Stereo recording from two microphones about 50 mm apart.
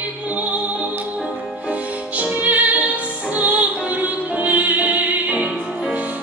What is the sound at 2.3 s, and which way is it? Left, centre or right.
Music, right.